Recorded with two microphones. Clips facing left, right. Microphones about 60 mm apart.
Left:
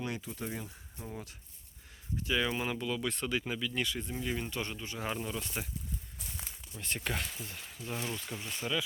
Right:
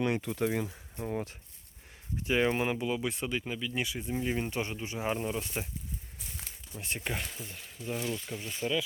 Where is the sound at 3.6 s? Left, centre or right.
Centre.